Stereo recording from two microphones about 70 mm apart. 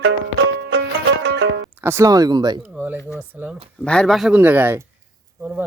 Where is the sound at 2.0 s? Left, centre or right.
Right.